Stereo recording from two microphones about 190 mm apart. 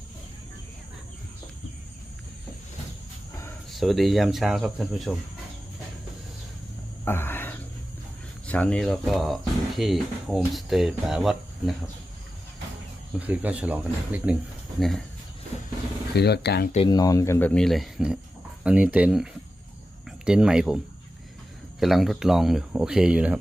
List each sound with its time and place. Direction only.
3.7 s speech: centre (ahead or behind)
7.0 s a sound: 10° left (ahead or behind)
8.4 s speech: 5° left (ahead or behind)
13.1 s speech: 10° right (ahead or behind)
16.1 s speech: 60° left (ahead or behind)
16.7 s speech: 25° left (ahead or behind); by 23.4 s 5° right (ahead or behind)